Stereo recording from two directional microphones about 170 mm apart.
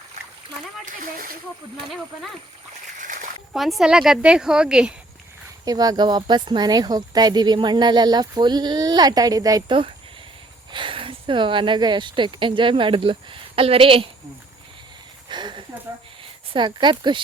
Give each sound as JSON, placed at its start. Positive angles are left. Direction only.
{"t": 0.9, "sound": "speech", "side_deg": -55}
{"t": 1.9, "sound": "speech", "side_deg": 0}
{"t": 3.0, "sound": "splash", "side_deg": -50}
{"t": 3.5, "sound": "speech", "side_deg": 0}
{"t": 5.6, "sound": "speech", "side_deg": -20}
{"t": 15.3, "sound": "a sound", "side_deg": -25}
{"t": 16.5, "sound": "speech", "side_deg": -30}